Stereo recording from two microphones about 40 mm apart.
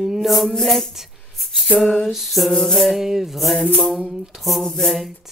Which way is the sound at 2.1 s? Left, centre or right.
Centre.